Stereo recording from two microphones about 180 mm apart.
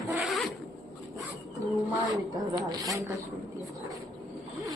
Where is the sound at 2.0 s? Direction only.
20° right (ahead or behind).